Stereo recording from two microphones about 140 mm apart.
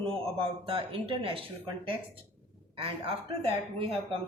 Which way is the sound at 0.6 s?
40° right (ahead or behind).